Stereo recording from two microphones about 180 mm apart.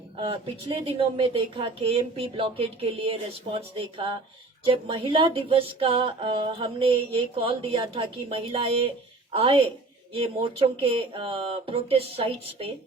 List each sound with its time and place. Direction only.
0.2 s speech: 30° right (ahead or behind)